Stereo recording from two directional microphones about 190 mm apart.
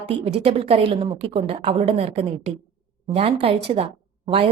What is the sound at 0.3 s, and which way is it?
A woman's voice, 30° right (ahead or behind).